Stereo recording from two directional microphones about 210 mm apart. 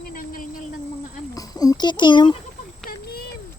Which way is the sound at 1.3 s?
15° left (ahead or behind).